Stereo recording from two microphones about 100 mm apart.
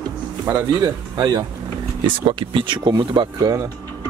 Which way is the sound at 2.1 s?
55° right (ahead or behind).